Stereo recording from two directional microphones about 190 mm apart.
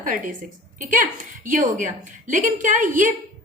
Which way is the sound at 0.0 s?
45° right (ahead or behind).